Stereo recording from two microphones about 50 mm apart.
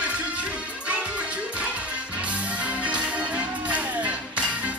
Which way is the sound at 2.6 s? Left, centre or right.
Right.